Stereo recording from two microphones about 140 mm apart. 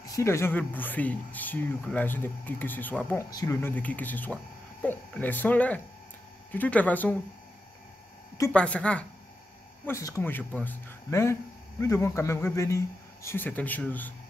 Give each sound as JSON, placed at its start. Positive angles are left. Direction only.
{"t": 0.0, "sound": "speech", "side_deg": 25}
{"t": 3.3, "sound": "a man's voice", "side_deg": 25}
{"t": 3.6, "sound": "speech", "side_deg": 10}
{"t": 8.5, "sound": "speech", "side_deg": 10}
{"t": 9.8, "sound": "a man's voice", "side_deg": 20}